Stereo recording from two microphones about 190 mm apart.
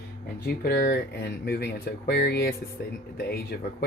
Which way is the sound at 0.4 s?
55° left (ahead or behind).